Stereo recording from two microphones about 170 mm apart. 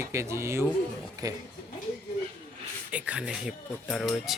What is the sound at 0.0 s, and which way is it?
Speech, 15° right (ahead or behind).